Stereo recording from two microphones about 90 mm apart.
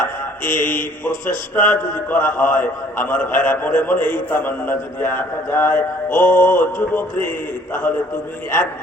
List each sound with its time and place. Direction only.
0.4 s a man's voice: 20° left (ahead or behind)